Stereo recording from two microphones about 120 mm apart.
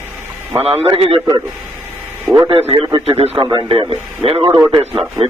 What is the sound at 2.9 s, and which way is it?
Speech, 55° right (ahead or behind).